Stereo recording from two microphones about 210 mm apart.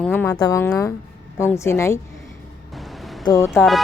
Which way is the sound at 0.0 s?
5° left (ahead or behind).